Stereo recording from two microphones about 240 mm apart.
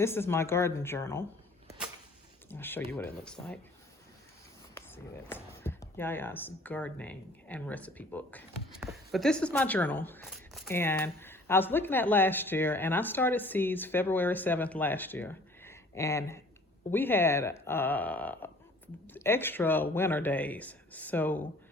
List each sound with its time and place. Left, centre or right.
0.0 s speech: centre
2.5 s speech: centre
5.3 s speech: centre